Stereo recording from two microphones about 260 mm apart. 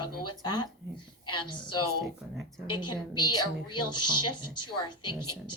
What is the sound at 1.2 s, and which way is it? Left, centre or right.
Speech, left.